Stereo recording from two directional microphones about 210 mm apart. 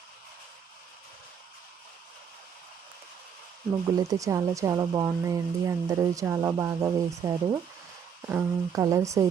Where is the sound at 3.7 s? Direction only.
15° right (ahead or behind).